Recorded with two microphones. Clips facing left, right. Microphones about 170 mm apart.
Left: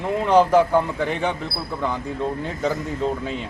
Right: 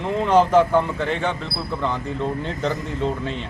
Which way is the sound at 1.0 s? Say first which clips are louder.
Even; 15° left (ahead or behind).